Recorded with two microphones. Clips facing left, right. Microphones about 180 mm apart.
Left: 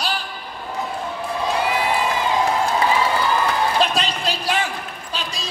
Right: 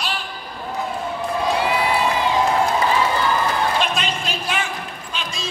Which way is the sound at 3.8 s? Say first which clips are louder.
Left 2 dB; 35° left (ahead or behind).